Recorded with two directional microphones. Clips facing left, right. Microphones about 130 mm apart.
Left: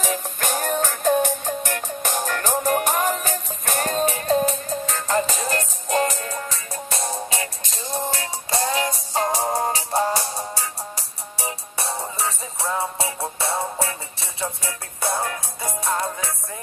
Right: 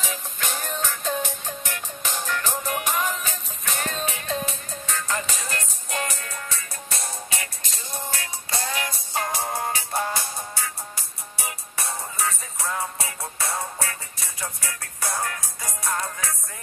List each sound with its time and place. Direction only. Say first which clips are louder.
0.0 s music: left 6 dB; 45° left (ahead or behind); by 16.3 s 25° left (ahead or behind)